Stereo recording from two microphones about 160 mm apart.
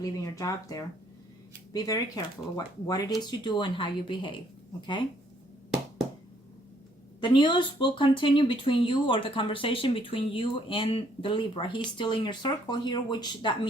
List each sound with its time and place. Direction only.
0.0 s speech: 20° left (ahead or behind)
7.2 s speech: 30° left (ahead or behind)